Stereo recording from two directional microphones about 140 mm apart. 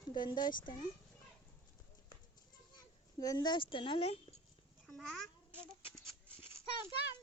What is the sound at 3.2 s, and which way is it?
Speech, 30° left (ahead or behind).